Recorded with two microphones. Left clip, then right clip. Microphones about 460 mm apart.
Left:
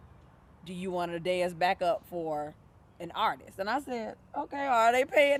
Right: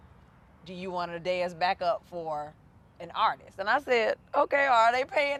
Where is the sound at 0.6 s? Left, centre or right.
Right.